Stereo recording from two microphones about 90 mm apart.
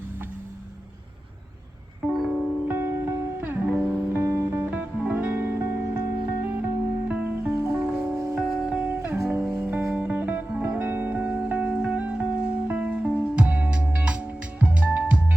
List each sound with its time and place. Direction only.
2.0 s music: 5° right (ahead or behind)
2.6 s music: 25° right (ahead or behind)
3.7 s music: 5° right (ahead or behind)
4.1 s music: 20° right (ahead or behind)
7.7 s music: centre (ahead or behind)
8.9 s music: 20° right (ahead or behind)
9.2 s music: centre (ahead or behind)
9.9 s music: 15° right (ahead or behind)